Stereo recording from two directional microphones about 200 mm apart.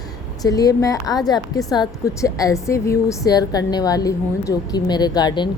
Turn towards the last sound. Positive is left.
turn(degrees=20)  # may be behind; listen again after turning